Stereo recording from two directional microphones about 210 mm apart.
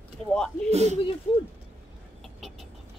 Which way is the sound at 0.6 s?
30° right (ahead or behind).